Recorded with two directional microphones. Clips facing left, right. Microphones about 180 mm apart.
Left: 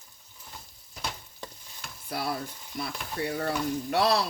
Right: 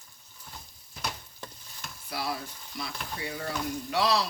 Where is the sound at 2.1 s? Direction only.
55° left (ahead or behind).